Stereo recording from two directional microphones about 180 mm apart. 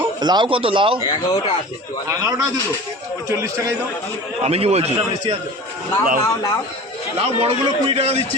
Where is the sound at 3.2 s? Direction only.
15° right (ahead or behind).